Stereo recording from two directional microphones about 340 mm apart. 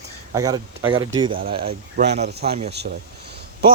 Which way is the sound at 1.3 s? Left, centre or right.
Right.